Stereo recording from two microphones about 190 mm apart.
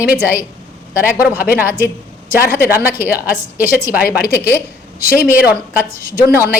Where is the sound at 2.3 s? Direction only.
50° left (ahead or behind).